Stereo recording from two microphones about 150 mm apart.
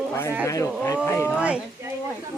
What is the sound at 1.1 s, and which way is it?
Speech, 15° left (ahead or behind).